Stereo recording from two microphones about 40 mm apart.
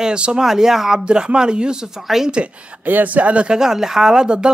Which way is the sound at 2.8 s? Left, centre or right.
Right.